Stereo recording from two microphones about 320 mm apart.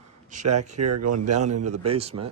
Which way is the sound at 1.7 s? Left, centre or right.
Centre.